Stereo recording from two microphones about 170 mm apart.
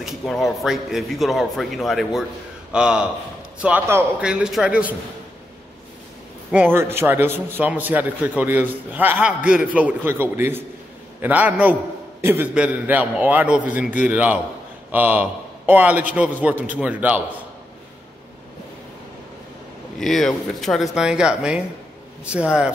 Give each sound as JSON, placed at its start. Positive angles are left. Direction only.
{"t": 0.0, "sound": "a man's voice", "side_deg": 0}
{"t": 6.5, "sound": "a man's voice", "side_deg": -10}
{"t": 20.0, "sound": "a man's voice", "side_deg": 0}